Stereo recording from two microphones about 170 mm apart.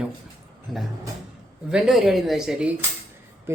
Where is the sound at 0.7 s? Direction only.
Centre (ahead or behind).